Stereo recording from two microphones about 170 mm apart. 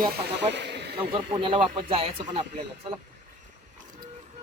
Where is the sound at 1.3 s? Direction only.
30° right (ahead or behind).